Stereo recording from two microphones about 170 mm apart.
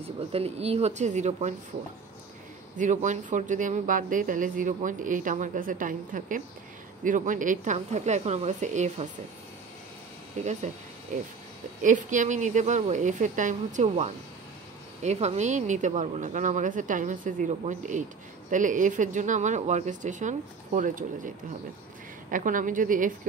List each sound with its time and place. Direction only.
0.3 s speech: 35° right (ahead or behind)
2.8 s speech: 45° right (ahead or behind)
10.4 s speech: 45° right (ahead or behind)
22.3 s speech: 50° right (ahead or behind)